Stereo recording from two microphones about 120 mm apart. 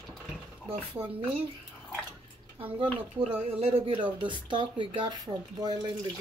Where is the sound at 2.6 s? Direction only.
50° right (ahead or behind).